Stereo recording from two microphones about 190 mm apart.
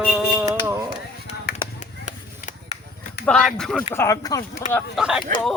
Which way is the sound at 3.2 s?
5° left (ahead or behind).